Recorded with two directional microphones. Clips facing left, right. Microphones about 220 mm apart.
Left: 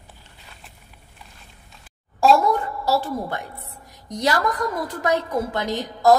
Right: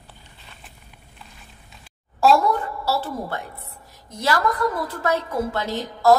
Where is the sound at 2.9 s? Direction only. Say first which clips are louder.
Left 2 dB; 15° left (ahead or behind).